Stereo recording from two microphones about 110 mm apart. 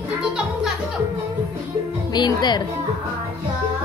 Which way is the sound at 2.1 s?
40° left (ahead or behind).